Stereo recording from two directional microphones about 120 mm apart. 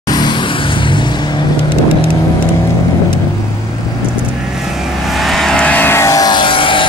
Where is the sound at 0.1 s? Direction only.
35° left (ahead or behind).